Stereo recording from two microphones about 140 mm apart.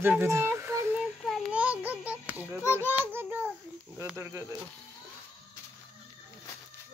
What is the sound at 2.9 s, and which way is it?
Child singing, 15° right (ahead or behind).